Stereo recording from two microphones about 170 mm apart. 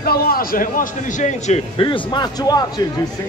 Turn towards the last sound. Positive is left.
turn(degrees=25)  # may be behind; listen again after turning